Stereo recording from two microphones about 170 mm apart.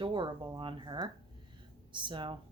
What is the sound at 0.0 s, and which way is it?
Speech, 30° right (ahead or behind).